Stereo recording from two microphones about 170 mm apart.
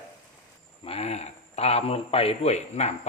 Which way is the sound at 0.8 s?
35° left (ahead or behind).